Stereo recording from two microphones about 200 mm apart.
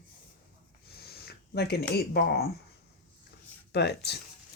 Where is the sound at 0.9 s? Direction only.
50° left (ahead or behind).